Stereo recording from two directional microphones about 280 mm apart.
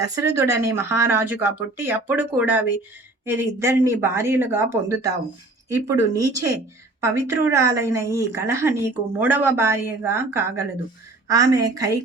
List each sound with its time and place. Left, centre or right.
0.0 s a woman's voice: centre